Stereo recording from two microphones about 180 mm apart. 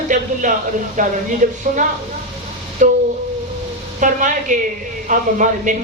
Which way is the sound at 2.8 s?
45° right (ahead or behind).